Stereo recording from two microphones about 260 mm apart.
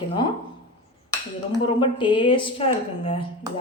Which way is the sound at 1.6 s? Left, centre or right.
Centre.